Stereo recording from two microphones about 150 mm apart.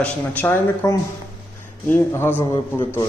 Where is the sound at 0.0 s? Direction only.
10° left (ahead or behind).